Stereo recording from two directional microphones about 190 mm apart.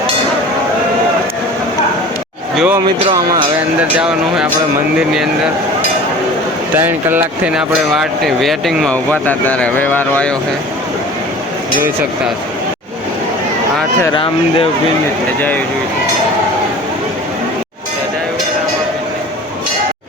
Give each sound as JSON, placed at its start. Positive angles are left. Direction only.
{"t": 2.6, "sound": "speech", "side_deg": -10}
{"t": 3.1, "sound": "speech", "side_deg": -20}
{"t": 4.0, "sound": "speech", "side_deg": -5}
{"t": 6.7, "sound": "speech", "side_deg": -10}